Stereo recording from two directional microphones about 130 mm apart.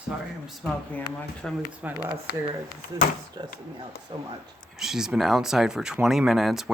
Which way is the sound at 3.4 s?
40° right (ahead or behind).